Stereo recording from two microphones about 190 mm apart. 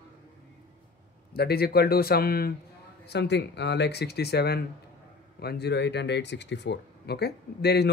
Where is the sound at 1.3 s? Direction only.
55° left (ahead or behind).